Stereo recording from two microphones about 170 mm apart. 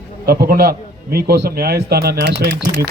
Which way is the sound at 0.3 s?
65° right (ahead or behind).